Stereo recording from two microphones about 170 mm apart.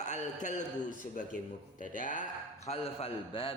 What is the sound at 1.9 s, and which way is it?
Speech, 50° left (ahead or behind).